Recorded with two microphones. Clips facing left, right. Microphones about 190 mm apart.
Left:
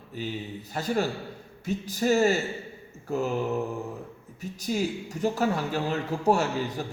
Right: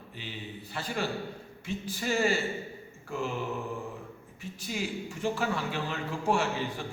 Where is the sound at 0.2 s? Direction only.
40° left (ahead or behind).